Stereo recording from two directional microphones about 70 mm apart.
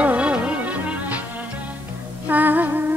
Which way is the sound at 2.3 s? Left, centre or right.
Right.